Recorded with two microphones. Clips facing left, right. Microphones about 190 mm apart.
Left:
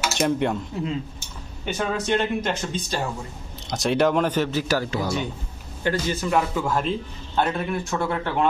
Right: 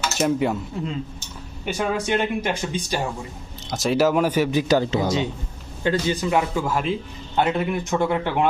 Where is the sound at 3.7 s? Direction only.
Centre (ahead or behind).